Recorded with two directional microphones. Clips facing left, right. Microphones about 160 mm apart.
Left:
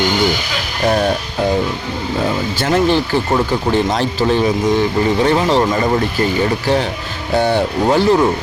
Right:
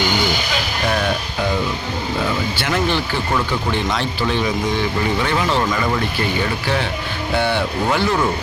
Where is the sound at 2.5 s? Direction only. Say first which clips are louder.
Left 9 dB; 40° left (ahead or behind).